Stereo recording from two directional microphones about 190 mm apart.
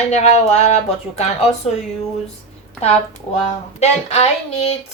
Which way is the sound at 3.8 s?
35° left (ahead or behind).